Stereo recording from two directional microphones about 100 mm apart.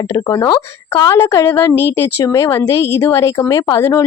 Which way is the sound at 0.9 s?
30° left (ahead or behind).